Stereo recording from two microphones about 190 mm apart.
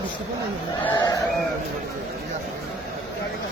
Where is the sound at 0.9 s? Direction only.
20° left (ahead or behind).